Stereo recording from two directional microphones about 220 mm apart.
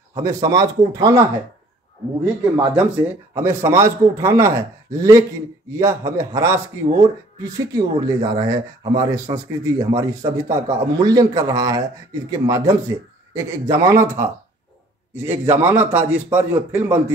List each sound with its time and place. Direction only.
0.1 s a man's voice: 15° right (ahead or behind)
2.7 s a man's voice: 5° right (ahead or behind)